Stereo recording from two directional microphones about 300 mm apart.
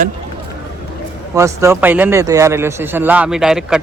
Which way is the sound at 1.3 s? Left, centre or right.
Centre.